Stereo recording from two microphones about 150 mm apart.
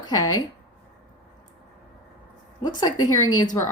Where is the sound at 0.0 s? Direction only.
25° left (ahead or behind).